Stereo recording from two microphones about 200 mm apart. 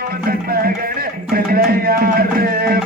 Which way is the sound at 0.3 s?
50° right (ahead or behind).